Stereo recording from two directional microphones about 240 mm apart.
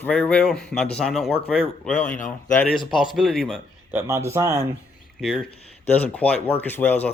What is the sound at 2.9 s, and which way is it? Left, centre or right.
Speech, centre.